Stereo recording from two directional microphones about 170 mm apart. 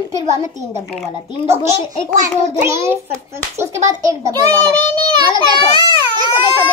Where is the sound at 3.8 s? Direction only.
20° right (ahead or behind).